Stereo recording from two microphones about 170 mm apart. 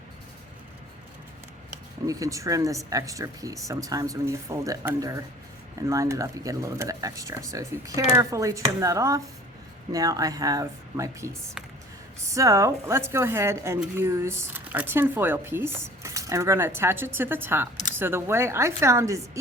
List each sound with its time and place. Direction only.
2.0 s speech: 20° right (ahead or behind)